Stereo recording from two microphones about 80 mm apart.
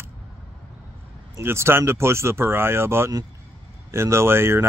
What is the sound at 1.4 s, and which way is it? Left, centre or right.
Speech, right.